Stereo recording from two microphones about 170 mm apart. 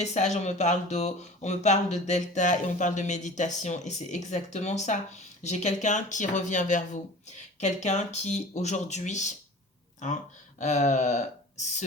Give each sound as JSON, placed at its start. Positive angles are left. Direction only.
{"t": 0.0, "sound": "speech", "side_deg": 40}
{"t": 10.6, "sound": "speech", "side_deg": 45}